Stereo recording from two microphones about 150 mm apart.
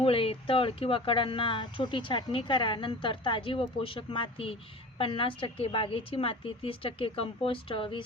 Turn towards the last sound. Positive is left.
turn(degrees=35)  # may be behind; listen again after turning